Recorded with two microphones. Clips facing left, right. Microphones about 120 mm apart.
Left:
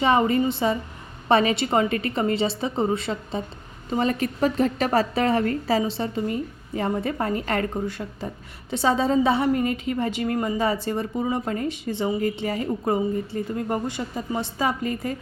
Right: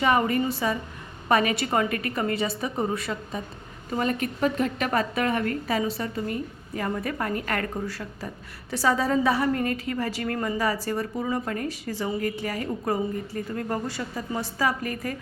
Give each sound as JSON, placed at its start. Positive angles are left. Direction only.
{"t": 0.0, "sound": "a woman's voice", "side_deg": 25}